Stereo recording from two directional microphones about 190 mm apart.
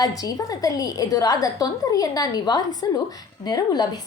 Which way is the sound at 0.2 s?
20° left (ahead or behind).